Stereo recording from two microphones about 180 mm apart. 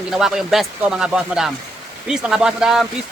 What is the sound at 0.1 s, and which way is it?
Speech, centre (ahead or behind).